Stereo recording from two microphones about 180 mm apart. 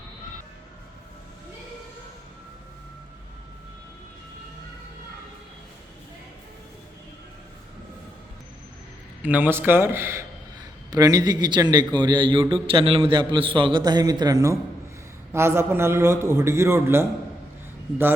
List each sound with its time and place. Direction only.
9.2 s a man's voice: 10° right (ahead or behind)